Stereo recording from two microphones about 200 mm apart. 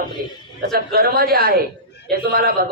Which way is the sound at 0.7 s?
45° right (ahead or behind).